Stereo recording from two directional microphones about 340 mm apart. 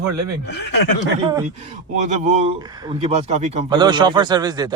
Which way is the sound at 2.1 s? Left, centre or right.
Centre.